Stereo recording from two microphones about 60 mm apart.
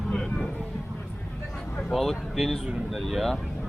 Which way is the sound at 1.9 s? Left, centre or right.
Centre.